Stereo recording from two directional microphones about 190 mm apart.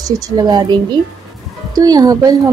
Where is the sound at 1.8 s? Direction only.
20° right (ahead or behind).